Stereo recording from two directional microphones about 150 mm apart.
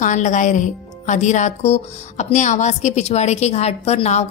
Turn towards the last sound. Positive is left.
turn(degrees=45)  # may be behind; listen again after turning